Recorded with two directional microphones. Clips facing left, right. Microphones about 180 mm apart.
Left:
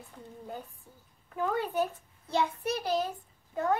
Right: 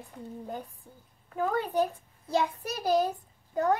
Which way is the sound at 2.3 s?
40° right (ahead or behind).